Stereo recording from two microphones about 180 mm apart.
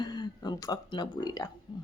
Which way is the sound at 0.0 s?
25° left (ahead or behind).